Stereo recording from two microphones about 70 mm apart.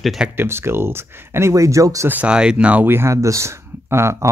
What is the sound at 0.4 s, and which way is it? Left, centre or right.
Speech, right.